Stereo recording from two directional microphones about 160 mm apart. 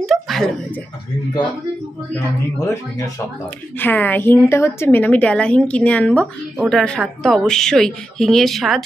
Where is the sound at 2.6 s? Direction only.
20° left (ahead or behind).